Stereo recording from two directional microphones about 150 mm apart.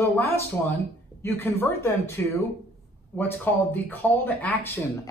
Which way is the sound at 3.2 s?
10° left (ahead or behind).